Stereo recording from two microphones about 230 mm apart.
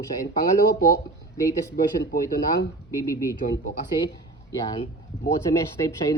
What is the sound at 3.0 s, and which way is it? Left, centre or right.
Speech, centre.